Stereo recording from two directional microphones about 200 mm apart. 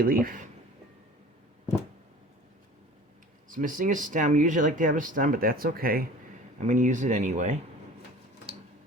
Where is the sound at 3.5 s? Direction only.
40° right (ahead or behind).